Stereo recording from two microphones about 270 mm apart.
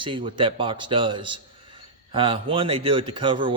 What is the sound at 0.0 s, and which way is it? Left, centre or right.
A man's voice, centre.